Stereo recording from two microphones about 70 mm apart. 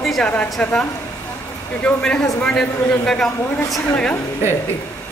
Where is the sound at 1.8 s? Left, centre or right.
Centre.